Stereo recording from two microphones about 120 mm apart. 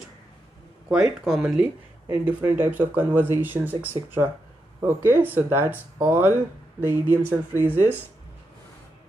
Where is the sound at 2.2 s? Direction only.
20° right (ahead or behind).